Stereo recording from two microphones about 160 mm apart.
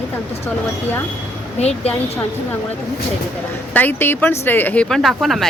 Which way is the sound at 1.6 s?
40° left (ahead or behind).